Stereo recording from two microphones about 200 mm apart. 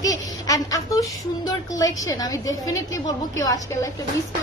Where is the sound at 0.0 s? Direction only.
15° left (ahead or behind).